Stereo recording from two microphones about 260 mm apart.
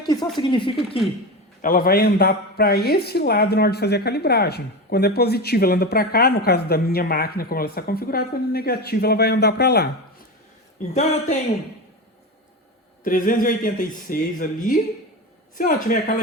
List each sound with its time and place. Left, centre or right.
0.0 s a sound: centre
0.3 s speech: centre
1.6 s speech: left
10.8 s speech: left
13.1 s speech: left